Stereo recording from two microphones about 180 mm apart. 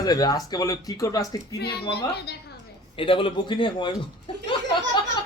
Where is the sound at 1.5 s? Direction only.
65° left (ahead or behind).